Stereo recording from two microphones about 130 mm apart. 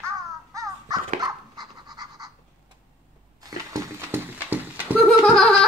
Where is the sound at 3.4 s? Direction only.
25° right (ahead or behind).